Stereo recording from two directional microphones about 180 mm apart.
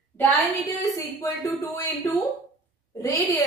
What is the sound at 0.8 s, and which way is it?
A woman's voice, 20° left (ahead or behind).